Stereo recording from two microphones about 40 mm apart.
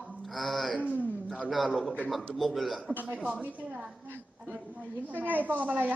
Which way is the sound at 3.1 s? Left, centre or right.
Right.